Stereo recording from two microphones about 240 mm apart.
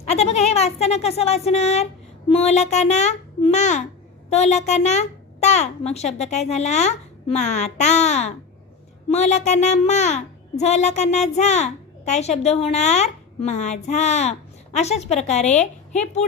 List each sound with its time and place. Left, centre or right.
0.0 s a woman's voice: left